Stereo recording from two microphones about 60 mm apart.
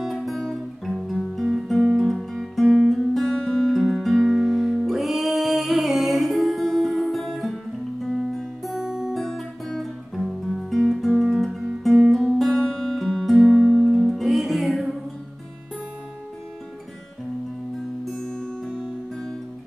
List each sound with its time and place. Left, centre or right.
0.0 s music: centre
18.1 s music: centre